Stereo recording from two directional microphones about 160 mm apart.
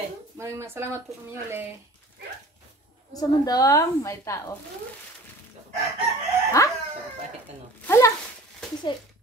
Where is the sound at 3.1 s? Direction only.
25° left (ahead or behind).